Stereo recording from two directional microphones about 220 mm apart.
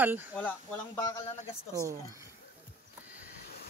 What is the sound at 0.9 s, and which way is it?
Speech, 15° left (ahead or behind).